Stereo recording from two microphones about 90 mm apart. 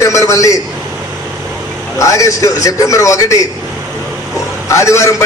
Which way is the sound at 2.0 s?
35° left (ahead or behind).